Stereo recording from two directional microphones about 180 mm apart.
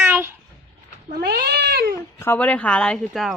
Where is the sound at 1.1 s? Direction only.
65° right (ahead or behind).